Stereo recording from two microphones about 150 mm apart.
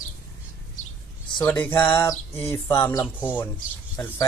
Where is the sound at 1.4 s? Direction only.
15° left (ahead or behind).